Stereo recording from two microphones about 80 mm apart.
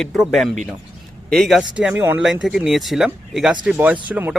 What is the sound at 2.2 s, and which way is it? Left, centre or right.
Speech, centre.